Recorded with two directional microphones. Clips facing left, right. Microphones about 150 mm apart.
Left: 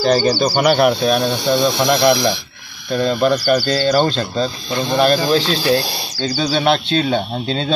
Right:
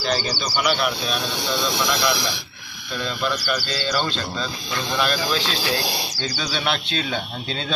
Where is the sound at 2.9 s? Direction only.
45° left (ahead or behind).